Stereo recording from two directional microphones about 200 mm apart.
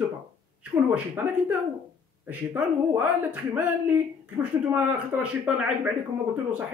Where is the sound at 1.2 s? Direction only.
10° right (ahead or behind).